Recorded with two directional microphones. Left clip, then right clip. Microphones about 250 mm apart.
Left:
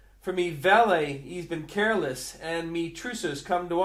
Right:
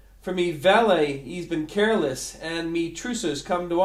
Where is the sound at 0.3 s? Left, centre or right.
Centre.